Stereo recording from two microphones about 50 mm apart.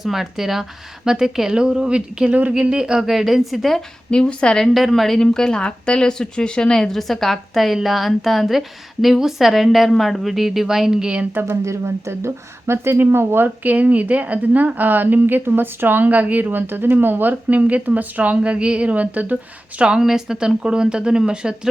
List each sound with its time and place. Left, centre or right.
0.0 s a woman's voice: centre
3.1 s a woman's voice: centre
4.1 s a woman's voice: centre
4.6 s a woman's voice: centre
11.0 s speech: right
11.6 s speech: right
13.7 s a woman's voice: right
17.6 s speech: right
20.0 s a woman's voice: centre